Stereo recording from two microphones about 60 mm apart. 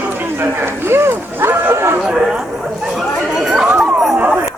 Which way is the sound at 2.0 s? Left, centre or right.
Centre.